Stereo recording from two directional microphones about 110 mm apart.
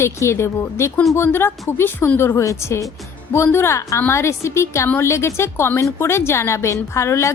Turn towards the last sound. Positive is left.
turn(degrees=25)  # may be behind; listen again after turning